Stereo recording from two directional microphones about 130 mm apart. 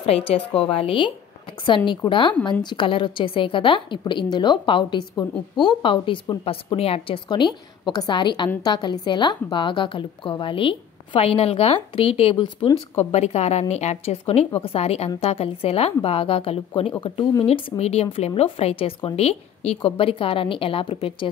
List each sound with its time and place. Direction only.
0.0 s a woman's voice: 50° left (ahead or behind)
17.0 s a woman's voice: 35° left (ahead or behind)
17.5 s a woman's voice: 50° left (ahead or behind)